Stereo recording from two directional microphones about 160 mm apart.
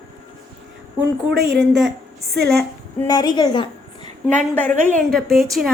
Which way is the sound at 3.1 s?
25° left (ahead or behind).